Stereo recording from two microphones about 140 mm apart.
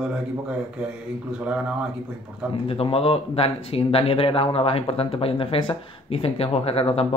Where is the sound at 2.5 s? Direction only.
45° left (ahead or behind).